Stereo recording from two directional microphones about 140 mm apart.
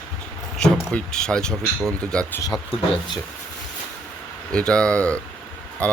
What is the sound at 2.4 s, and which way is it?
Speech, 25° left (ahead or behind).